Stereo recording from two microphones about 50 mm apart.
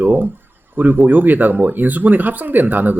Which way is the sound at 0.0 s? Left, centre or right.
Right.